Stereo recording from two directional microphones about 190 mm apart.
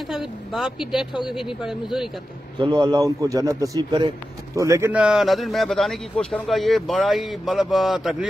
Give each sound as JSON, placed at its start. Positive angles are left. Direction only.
{"t": 0.1, "sound": "a man's voice", "side_deg": 0}
{"t": 2.6, "sound": "a man's voice", "side_deg": -25}